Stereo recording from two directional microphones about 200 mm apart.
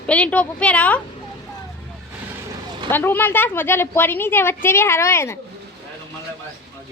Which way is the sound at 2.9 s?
10° left (ahead or behind).